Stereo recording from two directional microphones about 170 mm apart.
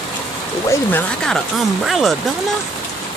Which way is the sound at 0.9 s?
Centre (ahead or behind).